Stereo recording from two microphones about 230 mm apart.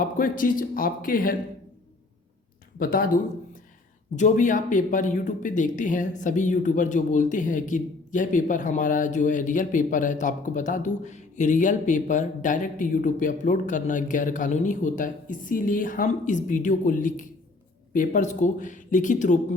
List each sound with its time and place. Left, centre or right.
0.0 s speech: left
2.7 s speech: left